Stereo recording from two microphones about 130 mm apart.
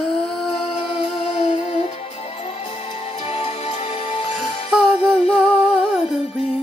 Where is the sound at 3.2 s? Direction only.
50° left (ahead or behind).